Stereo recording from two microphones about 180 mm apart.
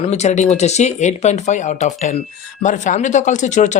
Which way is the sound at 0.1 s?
40° left (ahead or behind).